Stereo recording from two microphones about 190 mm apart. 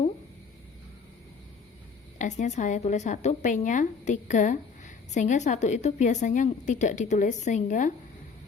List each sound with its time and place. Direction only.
2.1 s speech: 40° left (ahead or behind)